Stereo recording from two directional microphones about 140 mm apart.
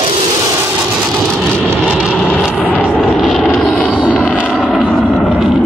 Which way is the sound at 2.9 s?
5° right (ahead or behind).